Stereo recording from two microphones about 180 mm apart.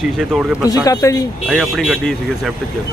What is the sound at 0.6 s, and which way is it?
Speech, 20° left (ahead or behind).